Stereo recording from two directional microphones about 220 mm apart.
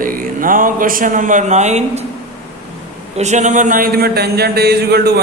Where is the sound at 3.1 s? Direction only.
30° right (ahead or behind); by 5.1 s 45° right (ahead or behind).